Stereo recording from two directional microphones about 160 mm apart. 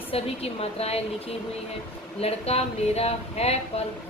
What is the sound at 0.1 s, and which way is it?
Speech, 40° left (ahead or behind).